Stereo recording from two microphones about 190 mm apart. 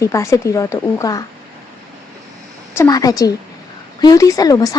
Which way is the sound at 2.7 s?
20° left (ahead or behind).